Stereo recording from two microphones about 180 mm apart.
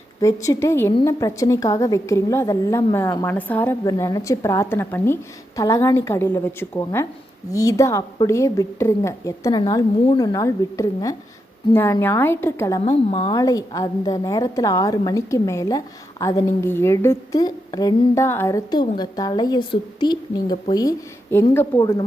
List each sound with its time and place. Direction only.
0.2 s a woman's voice: 15° left (ahead or behind)
12.8 s a woman's voice: 35° left (ahead or behind)
13.4 s a woman's voice: 20° left (ahead or behind)